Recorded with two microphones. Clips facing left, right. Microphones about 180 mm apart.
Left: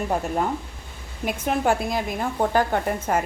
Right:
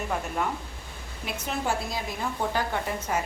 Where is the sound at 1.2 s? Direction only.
55° left (ahead or behind).